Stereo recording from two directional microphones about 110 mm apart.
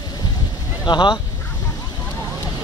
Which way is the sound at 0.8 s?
45° left (ahead or behind).